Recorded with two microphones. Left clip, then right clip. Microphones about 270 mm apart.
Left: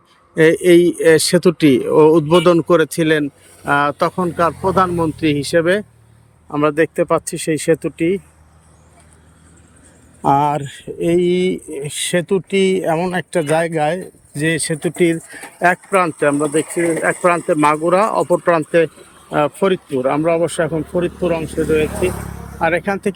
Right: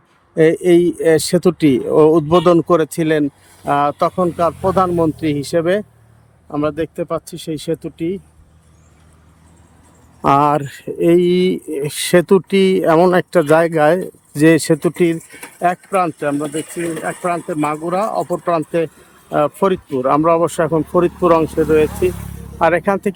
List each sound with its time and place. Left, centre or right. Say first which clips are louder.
0.3 s speech: left 1 dB; centre
10.2 s speech: right 2 dB; centre